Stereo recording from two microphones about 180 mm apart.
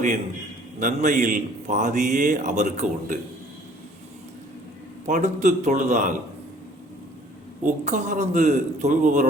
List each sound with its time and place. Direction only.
0.8 s a man's voice: 45° right (ahead or behind)
5.0 s a man's voice: 45° right (ahead or behind)
7.6 s a man's voice: 45° right (ahead or behind)